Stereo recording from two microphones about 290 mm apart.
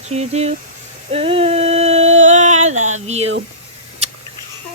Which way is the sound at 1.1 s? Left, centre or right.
Centre.